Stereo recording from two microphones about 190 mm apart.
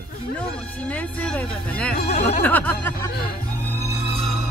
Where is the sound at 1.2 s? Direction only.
5° left (ahead or behind).